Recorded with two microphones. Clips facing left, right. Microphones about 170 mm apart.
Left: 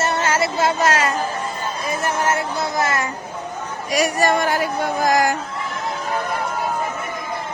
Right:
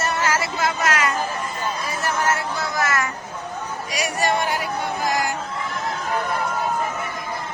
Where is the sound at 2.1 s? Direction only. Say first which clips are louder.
Left 1 dB; 20° left (ahead or behind).